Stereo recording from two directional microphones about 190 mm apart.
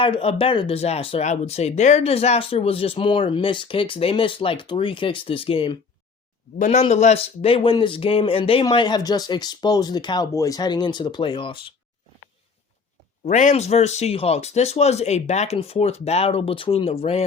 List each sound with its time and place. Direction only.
0.0 s speech: 30° left (ahead or behind)
6.6 s speech: 40° left (ahead or behind)
13.2 s speech: 40° left (ahead or behind)